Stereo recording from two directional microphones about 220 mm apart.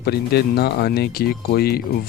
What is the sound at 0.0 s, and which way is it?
Speech, 45° left (ahead or behind).